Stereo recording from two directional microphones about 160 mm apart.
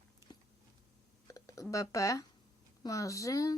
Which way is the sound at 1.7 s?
20° left (ahead or behind).